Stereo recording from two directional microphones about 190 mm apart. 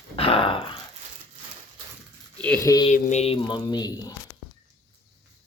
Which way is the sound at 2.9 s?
35° left (ahead or behind).